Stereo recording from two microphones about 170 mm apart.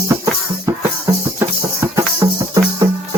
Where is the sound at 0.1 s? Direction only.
20° right (ahead or behind).